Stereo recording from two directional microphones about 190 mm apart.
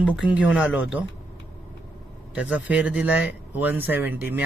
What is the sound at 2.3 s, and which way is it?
Speech, 5° right (ahead or behind).